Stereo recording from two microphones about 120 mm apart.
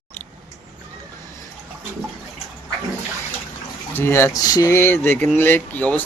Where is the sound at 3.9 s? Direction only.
20° left (ahead or behind).